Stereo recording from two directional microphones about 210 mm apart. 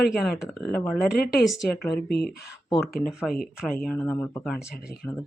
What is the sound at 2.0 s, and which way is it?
Speech, 50° left (ahead or behind).